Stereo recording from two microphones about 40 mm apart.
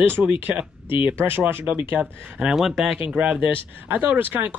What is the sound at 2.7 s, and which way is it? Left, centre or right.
Speech, centre.